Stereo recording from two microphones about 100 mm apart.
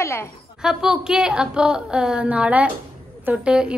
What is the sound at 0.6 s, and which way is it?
A woman's voice, 5° right (ahead or behind).